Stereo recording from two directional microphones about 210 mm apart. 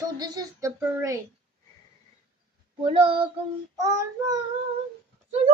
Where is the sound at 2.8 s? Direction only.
25° right (ahead or behind).